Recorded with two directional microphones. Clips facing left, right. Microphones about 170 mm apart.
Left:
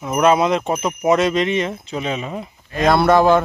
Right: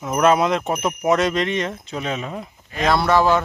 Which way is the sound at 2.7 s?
50° left (ahead or behind).